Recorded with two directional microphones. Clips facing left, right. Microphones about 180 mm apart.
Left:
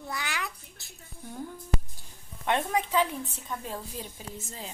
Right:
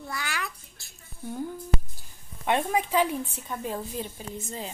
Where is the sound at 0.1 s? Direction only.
20° left (ahead or behind).